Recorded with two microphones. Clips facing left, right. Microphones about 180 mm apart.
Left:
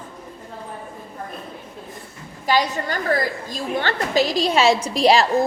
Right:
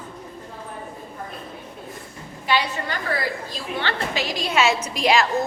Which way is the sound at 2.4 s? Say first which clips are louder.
Left 3 dB; 40° left (ahead or behind).